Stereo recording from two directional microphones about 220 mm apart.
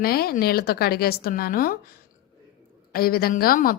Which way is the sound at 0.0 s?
45° left (ahead or behind).